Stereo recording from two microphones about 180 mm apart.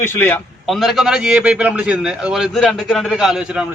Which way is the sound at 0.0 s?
10° left (ahead or behind).